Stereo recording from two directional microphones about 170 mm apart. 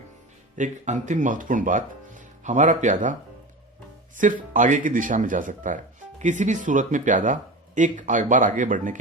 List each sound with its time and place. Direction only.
0.5 s speech: 45° right (ahead or behind)